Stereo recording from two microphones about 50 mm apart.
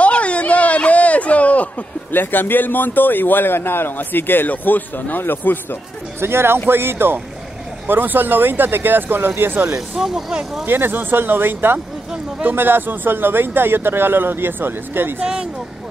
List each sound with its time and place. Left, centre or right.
0.0 s a sound: left
2.1 s speech: left
6.2 s speech: right
7.8 s speech: right
9.8 s speech: centre
10.6 s speech: right